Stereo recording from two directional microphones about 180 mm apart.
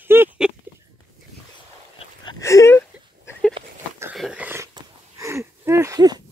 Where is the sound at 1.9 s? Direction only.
25° left (ahead or behind).